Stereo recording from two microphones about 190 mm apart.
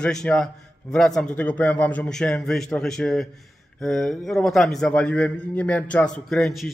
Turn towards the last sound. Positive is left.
turn(degrees=0)  # may be behind; listen again after turning